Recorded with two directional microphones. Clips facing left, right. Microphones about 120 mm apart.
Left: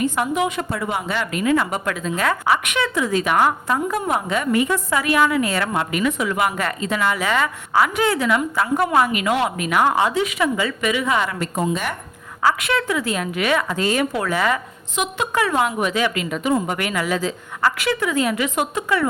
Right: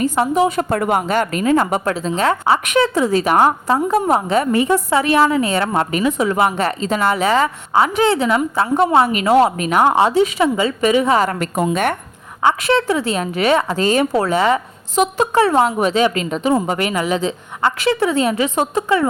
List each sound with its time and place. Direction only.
0.0 s a woman's voice: 35° right (ahead or behind)
0.7 s a woman's voice: 50° right (ahead or behind); by 5.7 s 30° right (ahead or behind)
5.7 s a woman's voice: 40° right (ahead or behind)
11.3 s a woman's voice: 60° right (ahead or behind)
12.6 s a woman's voice: 30° right (ahead or behind)
14.9 s a woman's voice: 35° right (ahead or behind)